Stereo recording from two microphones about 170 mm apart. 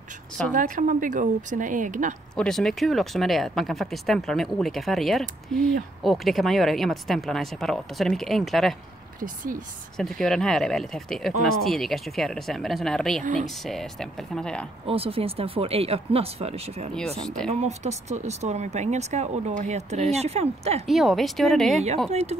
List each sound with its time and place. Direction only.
0.5 s speech: 50° right (ahead or behind)
2.3 s speech: 5° left (ahead or behind)
9.2 s speech: 50° right (ahead or behind)
9.9 s speech: 5° left (ahead or behind)
13.2 s speech: 50° right (ahead or behind)
13.7 s speech: centre (ahead or behind)
14.9 s speech: 35° right (ahead or behind)
20.8 s speech: centre (ahead or behind)
22.1 s speech: 40° right (ahead or behind)